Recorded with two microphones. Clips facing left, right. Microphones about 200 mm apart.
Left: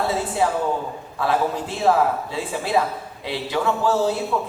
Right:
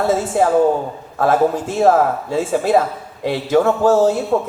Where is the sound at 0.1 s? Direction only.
50° right (ahead or behind).